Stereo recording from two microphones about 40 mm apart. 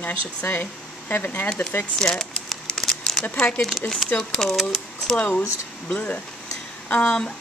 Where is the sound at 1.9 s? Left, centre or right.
Centre.